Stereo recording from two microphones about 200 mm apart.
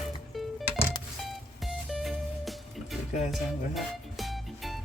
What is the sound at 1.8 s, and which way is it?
Music, centre (ahead or behind).